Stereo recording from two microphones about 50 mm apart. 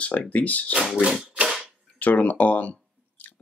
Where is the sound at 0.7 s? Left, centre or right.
Centre.